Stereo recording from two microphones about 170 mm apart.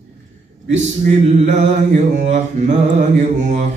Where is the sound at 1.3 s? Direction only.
45° right (ahead or behind).